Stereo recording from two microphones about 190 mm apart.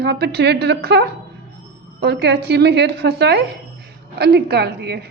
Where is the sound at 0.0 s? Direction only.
60° right (ahead or behind).